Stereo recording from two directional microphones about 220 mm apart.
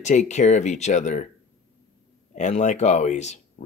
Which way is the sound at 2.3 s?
35° left (ahead or behind).